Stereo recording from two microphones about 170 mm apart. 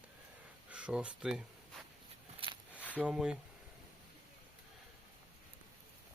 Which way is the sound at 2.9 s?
5° right (ahead or behind).